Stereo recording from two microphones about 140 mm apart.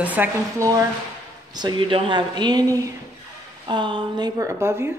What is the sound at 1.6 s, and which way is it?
Speech, 35° right (ahead or behind).